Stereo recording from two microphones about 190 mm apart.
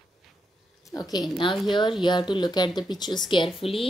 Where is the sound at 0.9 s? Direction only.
20° left (ahead or behind).